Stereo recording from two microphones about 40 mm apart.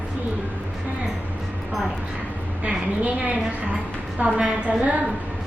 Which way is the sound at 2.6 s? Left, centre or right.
Right.